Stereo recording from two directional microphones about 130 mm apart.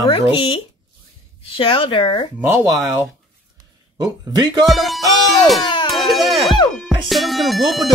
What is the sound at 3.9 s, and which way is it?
Speech, 30° right (ahead or behind).